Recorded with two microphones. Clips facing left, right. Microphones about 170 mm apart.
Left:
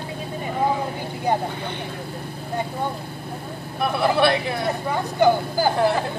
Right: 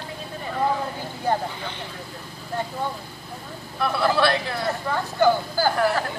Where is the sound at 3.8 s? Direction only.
20° left (ahead or behind).